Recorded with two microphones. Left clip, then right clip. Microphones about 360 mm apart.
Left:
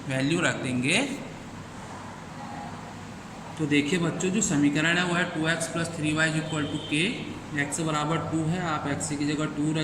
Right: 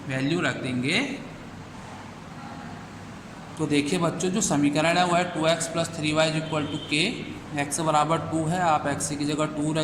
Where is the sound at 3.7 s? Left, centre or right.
Centre.